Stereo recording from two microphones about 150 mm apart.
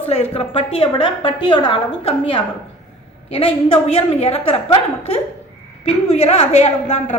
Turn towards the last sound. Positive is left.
turn(degrees=50)  # may be behind; listen again after turning